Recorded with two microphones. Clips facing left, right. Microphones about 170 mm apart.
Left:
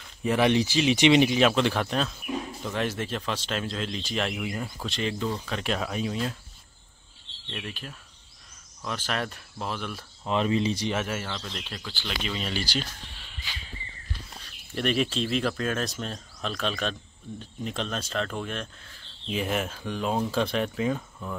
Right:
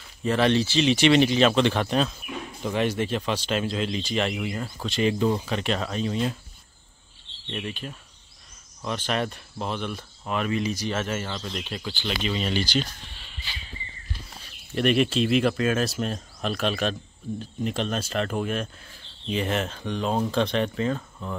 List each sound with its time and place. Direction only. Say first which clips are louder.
0.2 s speech: right 1 dB; 15° left (ahead or behind)
7.5 s speech: right 5 dB; centre (ahead or behind)
10.2 s speech: left 2 dB; 25° left (ahead or behind)
10.9 s speech: right 1 dB; 15° left (ahead or behind)
11.1 s speech: right 3 dB; 5° right (ahead or behind)
14.3 s speech: right 5 dB; centre (ahead or behind)
19.2 s speech: right 2 dB; 5° left (ahead or behind)